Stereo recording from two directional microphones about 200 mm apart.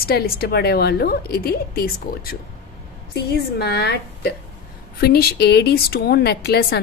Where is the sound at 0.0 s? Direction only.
50° left (ahead or behind).